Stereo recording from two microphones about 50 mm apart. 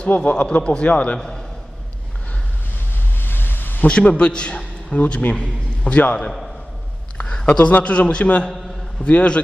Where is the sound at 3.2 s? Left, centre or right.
Left.